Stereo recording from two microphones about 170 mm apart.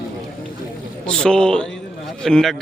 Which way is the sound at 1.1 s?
5° left (ahead or behind).